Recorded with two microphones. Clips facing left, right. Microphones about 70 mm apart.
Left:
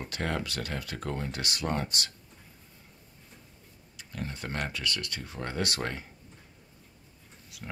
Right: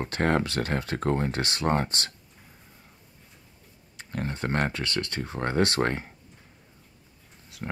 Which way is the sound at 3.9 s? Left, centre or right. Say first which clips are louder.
Right 6 dB; right.